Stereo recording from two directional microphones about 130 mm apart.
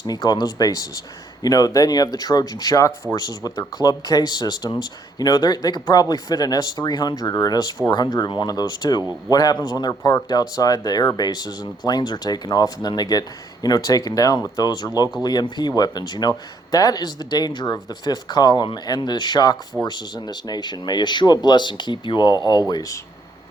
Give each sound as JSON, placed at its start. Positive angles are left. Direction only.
{"t": 0.1, "sound": "speech", "side_deg": 30}